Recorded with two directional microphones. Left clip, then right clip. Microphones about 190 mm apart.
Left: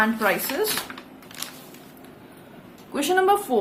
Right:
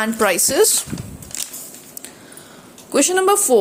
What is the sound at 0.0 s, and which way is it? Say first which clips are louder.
Speech: right 4 dB; 50° right (ahead or behind).